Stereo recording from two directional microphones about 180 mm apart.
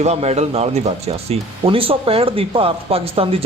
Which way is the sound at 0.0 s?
35° right (ahead or behind).